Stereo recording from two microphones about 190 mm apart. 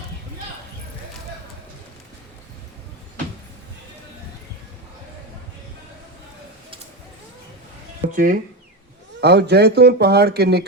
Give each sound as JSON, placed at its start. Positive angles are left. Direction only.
{"t": 8.1, "sound": "speech", "side_deg": -45}
{"t": 9.2, "sound": "speech", "side_deg": -60}